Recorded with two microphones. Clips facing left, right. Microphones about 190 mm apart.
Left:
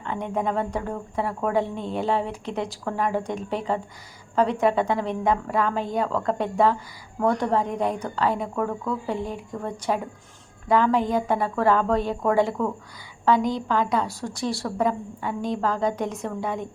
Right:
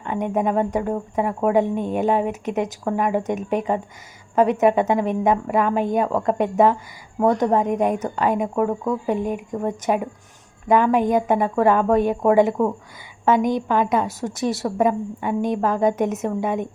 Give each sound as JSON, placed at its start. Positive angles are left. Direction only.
{"t": 0.0, "sound": "a woman's voice", "side_deg": -15}